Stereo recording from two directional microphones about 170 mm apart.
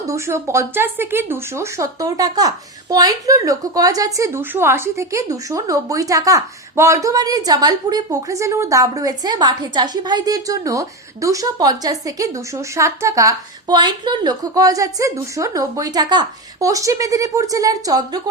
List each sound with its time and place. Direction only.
0.0 s a woman's voice: 15° right (ahead or behind)